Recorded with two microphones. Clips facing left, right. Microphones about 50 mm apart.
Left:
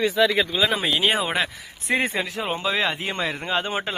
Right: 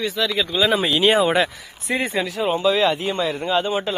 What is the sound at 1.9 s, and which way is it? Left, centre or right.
Speech, left.